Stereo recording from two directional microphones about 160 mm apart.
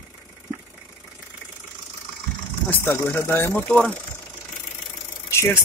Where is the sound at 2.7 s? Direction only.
15° left (ahead or behind).